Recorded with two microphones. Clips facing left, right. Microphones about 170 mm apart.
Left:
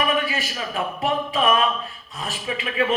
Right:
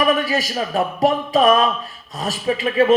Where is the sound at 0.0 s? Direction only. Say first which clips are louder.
Right 5 dB; 40° right (ahead or behind).